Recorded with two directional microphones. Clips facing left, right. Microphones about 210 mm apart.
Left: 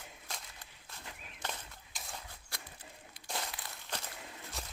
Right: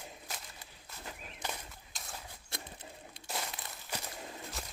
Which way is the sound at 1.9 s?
Centre (ahead or behind).